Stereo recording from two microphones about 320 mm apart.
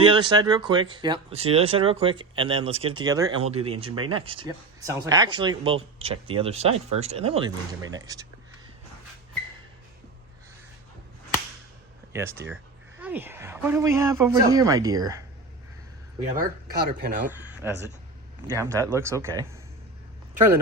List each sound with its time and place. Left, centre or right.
0.0 s speech: centre
12.1 s speech: centre
16.3 s speech: right
17.3 s speech: centre